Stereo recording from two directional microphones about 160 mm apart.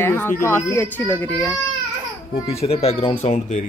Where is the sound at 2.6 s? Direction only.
40° left (ahead or behind).